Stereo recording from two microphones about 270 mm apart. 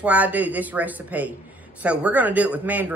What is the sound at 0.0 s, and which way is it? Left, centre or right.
Speech, centre.